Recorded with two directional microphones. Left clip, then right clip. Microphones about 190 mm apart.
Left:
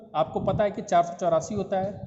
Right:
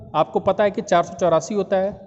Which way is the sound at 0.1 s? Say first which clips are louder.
Right 7 dB; 50° right (ahead or behind).